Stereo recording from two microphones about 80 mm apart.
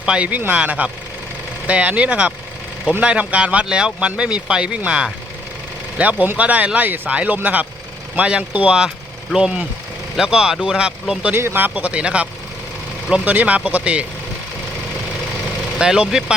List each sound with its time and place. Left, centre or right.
0.0 s speech: centre
11.3 s speech: right
15.8 s speech: centre